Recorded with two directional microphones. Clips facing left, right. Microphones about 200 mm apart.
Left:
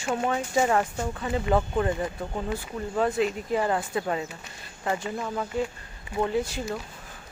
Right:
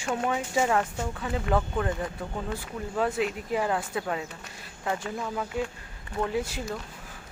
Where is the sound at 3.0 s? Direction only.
5° right (ahead or behind).